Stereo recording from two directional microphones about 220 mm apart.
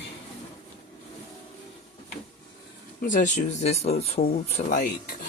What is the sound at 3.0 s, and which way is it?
Speech, 35° left (ahead or behind).